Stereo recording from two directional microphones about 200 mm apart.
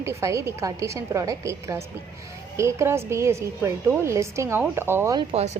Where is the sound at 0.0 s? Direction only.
15° right (ahead or behind).